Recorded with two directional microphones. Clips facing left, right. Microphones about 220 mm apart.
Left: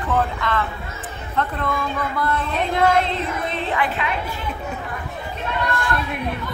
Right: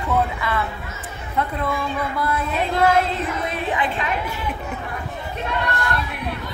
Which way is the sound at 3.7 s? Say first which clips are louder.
Left 2 dB; 20° right (ahead or behind).